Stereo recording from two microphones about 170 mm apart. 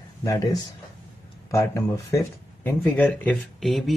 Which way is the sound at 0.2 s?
20° left (ahead or behind).